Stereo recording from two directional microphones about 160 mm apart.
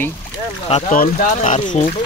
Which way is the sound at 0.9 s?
55° left (ahead or behind).